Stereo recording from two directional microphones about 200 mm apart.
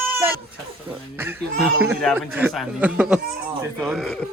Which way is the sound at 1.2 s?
10° right (ahead or behind).